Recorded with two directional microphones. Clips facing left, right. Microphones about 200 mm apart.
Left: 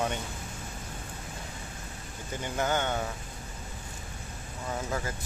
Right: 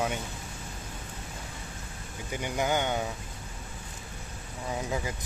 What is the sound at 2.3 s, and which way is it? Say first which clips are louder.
Speech: right 1 dB; 15° right (ahead or behind).